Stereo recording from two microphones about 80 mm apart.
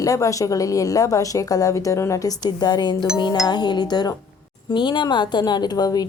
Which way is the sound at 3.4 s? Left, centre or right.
Left.